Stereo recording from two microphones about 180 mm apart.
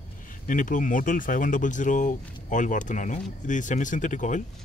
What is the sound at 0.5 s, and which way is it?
Speech, 45° left (ahead or behind).